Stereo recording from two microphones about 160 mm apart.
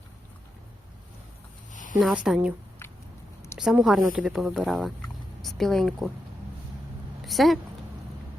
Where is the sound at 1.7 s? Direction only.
55° left (ahead or behind).